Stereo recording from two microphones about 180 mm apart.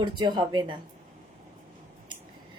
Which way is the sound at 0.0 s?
25° right (ahead or behind).